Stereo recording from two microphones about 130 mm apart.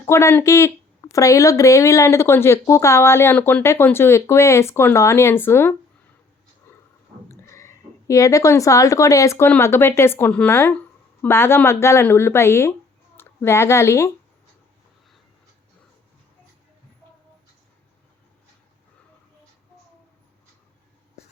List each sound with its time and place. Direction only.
0.0 s speech: 20° left (ahead or behind)
7.3 s speech: 20° left (ahead or behind)